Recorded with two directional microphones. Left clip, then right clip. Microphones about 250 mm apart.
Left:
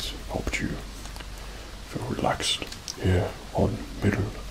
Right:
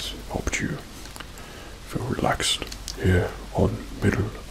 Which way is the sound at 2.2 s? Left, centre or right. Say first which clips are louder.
Right 2 dB; right.